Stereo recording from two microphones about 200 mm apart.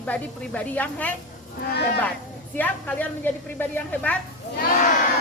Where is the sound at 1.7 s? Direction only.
55° left (ahead or behind).